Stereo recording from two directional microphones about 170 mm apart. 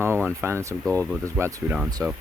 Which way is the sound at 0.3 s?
15° right (ahead or behind).